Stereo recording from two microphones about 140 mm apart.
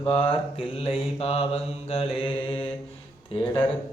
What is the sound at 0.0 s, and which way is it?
Speech, 40° left (ahead or behind).